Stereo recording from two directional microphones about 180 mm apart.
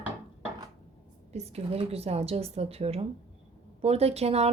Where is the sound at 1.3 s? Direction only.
35° right (ahead or behind).